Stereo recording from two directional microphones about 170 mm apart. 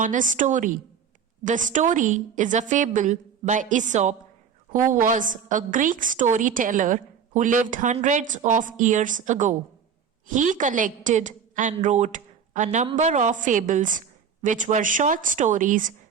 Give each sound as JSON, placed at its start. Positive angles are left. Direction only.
{"t": 0.0, "sound": "a woman's voice", "side_deg": -50}